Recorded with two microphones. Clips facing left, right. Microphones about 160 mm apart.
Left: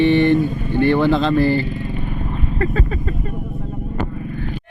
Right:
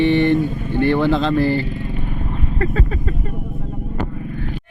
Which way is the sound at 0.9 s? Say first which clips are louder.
Left 1 dB; 20° left (ahead or behind).